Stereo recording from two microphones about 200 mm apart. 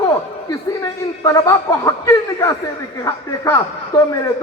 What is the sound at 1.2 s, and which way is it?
A man's voice, 15° left (ahead or behind).